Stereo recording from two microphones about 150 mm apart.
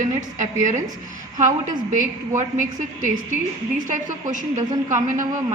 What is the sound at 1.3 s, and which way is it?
A woman's voice, 60° right (ahead or behind).